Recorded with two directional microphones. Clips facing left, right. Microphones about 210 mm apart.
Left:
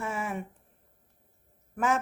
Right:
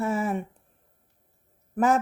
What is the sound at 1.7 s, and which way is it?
Speech, 40° right (ahead or behind).